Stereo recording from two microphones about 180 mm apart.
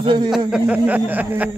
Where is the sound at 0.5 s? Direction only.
5° right (ahead or behind).